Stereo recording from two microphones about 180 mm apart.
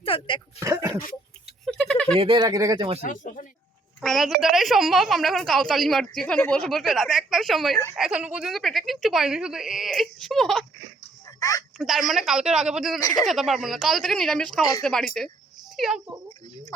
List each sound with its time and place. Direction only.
0.0 s speech: 30° left (ahead or behind)
0.6 s speech: 20° right (ahead or behind)
1.6 s a sound: 5° left (ahead or behind)
2.1 s speech: 25° right (ahead or behind)
3.0 s speech: 45° left (ahead or behind)
4.0 s a woman's voice: centre (ahead or behind)
11.3 s speech: 20° left (ahead or behind)
11.8 s a woman's voice: centre (ahead or behind)